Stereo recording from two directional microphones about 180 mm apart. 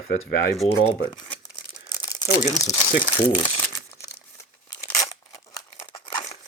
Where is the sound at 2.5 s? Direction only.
15° left (ahead or behind).